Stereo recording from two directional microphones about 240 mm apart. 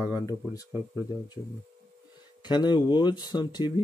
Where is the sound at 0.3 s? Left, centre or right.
Centre.